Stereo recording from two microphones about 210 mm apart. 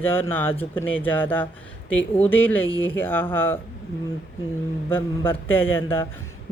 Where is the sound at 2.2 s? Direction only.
10° left (ahead or behind).